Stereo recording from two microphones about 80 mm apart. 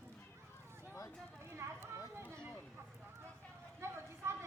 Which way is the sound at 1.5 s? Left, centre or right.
Right.